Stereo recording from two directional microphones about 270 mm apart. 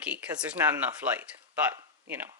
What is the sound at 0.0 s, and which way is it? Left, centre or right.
Speech, centre.